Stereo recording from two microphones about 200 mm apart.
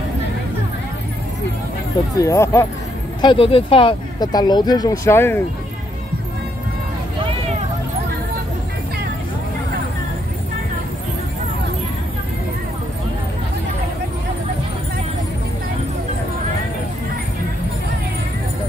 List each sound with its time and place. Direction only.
2.1 s speech: 15° left (ahead or behind)
3.2 s speech: 25° left (ahead or behind)